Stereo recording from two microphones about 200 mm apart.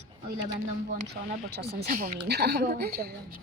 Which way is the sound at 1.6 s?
50° right (ahead or behind).